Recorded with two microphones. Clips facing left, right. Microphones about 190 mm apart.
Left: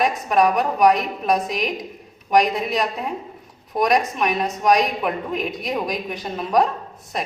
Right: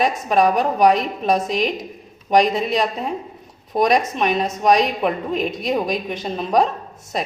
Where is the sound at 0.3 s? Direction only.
30° right (ahead or behind).